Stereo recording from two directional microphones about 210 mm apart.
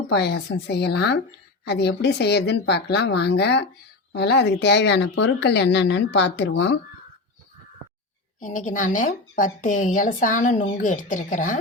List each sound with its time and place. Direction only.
0.1 s speech: 55° left (ahead or behind)
8.4 s a woman's voice: 40° left (ahead or behind)